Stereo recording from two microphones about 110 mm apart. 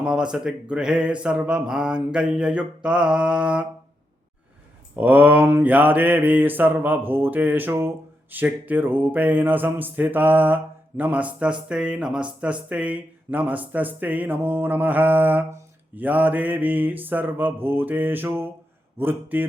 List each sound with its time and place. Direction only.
0.0 s mantra: 5° right (ahead or behind)
4.9 s mantra: 15° right (ahead or behind)